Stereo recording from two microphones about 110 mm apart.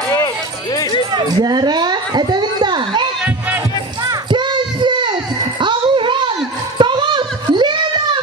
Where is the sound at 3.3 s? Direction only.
15° right (ahead or behind).